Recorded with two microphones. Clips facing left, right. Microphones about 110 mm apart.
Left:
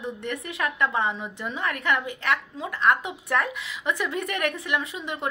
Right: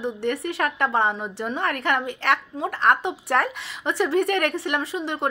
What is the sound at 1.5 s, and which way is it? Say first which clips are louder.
Speech: right 2 dB; 60° right (ahead or behind).